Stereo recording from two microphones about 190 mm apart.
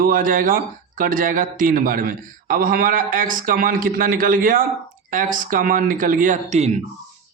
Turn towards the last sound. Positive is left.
turn(degrees=-35)  # may be behind; listen again after turning